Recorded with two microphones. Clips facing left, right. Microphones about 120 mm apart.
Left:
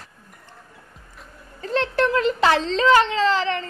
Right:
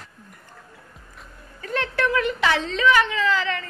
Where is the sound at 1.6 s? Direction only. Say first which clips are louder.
Left 4 dB; 30° left (ahead or behind).